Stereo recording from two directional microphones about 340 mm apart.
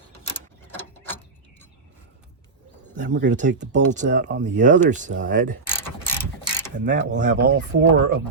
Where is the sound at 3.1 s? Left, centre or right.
Right.